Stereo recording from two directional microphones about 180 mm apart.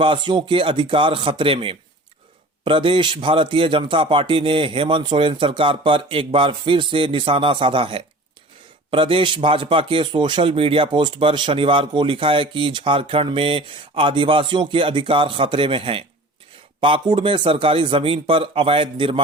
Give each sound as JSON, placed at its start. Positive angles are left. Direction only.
{"t": 0.0, "sound": "a man's voice", "side_deg": -25}